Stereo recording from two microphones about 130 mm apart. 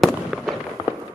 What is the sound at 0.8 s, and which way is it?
Fireworks, 40° left (ahead or behind).